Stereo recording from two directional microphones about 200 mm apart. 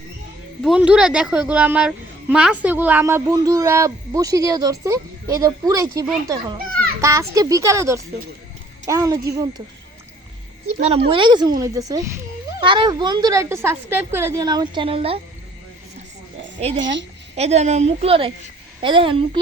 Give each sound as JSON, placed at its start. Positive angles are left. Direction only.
{"t": 0.6, "sound": "a woman's voice", "side_deg": -5}
{"t": 10.9, "sound": "a woman's voice", "side_deg": -25}
{"t": 16.7, "sound": "a woman's voice", "side_deg": -65}
{"t": 17.3, "sound": "a woman's voice", "side_deg": -35}